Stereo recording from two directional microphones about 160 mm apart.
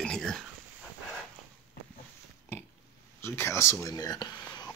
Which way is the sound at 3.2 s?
15° left (ahead or behind).